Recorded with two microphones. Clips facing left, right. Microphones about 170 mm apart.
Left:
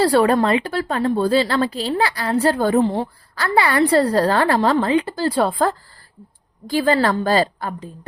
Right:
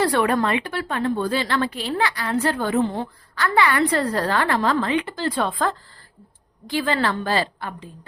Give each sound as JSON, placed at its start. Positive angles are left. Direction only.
{"t": 0.0, "sound": "a woman's voice", "side_deg": 35}